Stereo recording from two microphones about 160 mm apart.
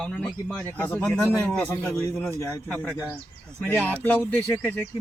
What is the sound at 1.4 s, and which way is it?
Speech, 10° left (ahead or behind).